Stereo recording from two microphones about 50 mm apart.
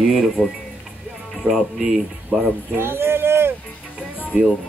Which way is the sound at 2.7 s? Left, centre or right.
Right.